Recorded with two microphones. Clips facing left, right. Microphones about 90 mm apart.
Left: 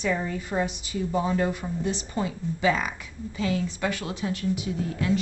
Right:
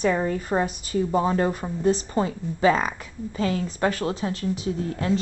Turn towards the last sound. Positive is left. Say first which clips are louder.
# right 2 dB
turn(degrees=-35)  # may be behind; listen again after turning